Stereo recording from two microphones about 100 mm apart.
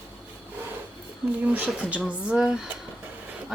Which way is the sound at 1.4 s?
15° right (ahead or behind).